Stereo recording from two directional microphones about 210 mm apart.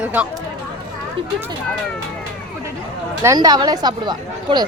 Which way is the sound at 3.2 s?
15° right (ahead or behind).